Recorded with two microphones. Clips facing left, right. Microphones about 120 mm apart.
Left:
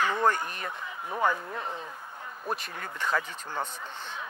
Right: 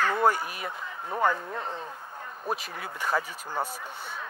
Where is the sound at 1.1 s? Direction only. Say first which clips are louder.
Right 2 dB; 30° right (ahead or behind).